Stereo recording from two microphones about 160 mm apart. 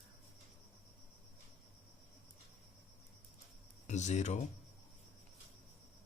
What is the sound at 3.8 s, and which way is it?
Speech, 45° left (ahead or behind).